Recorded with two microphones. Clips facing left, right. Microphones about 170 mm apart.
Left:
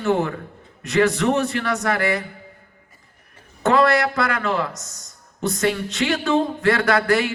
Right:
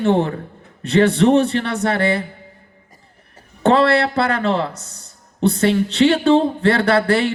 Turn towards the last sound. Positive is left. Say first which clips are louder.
# right 3 dB
turn(degrees=-30)  # may be behind; listen again after turning